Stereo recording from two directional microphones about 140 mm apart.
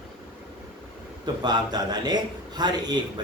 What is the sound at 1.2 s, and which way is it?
A man's voice, 30° right (ahead or behind).